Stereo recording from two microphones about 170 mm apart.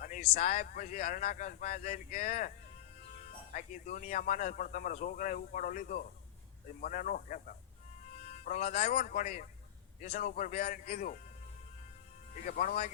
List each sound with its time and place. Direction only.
0.0 s speech: 45° left (ahead or behind)
3.5 s speech: 50° left (ahead or behind)
12.5 s speech: 55° left (ahead or behind)